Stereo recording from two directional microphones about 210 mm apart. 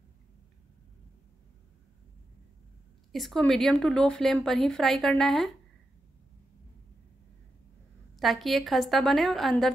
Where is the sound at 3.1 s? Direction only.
Centre (ahead or behind).